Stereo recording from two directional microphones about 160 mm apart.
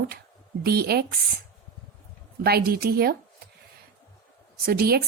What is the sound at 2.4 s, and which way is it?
Speech, 80° right.